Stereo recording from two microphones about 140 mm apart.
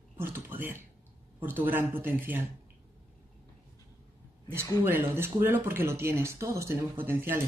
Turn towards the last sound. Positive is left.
turn(degrees=-15)  # may be behind; listen again after turning